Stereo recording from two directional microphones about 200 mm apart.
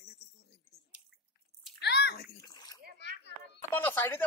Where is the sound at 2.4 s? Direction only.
20° left (ahead or behind).